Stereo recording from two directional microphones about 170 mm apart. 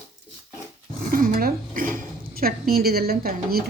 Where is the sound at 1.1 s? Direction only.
55° right (ahead or behind).